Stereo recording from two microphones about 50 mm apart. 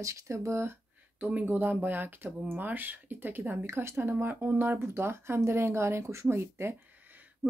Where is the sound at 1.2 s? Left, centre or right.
Right.